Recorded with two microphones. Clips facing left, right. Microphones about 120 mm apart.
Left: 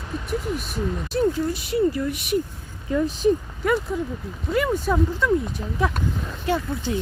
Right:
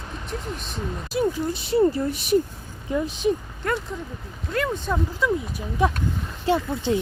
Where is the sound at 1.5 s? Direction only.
30° right (ahead or behind).